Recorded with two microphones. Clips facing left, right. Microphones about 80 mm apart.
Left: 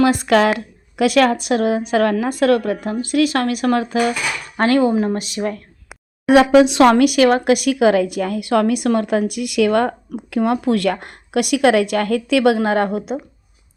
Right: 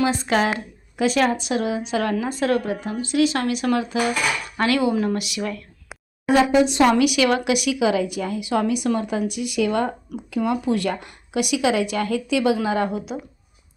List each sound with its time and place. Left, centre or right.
0.0 s a woman's voice: left
4.5 s a woman's voice: left
6.2 s speech: left
6.9 s a woman's voice: left